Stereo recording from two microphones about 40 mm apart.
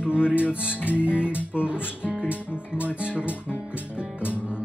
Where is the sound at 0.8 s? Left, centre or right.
Left.